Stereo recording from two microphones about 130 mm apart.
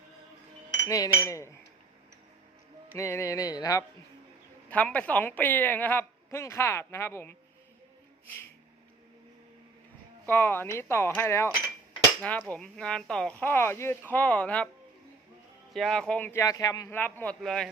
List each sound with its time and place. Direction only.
0.9 s speech: 25° left (ahead or behind)
2.9 s speech: 20° left (ahead or behind)
4.7 s speech: 10° left (ahead or behind)
10.2 s speech: 15° left (ahead or behind)
12.5 s speech: 5° left (ahead or behind)
15.7 s speech: 5° left (ahead or behind)
16.4 s speech: 25° left (ahead or behind)
16.9 s speech: 15° left (ahead or behind)
17.4 s speech: 5° left (ahead or behind)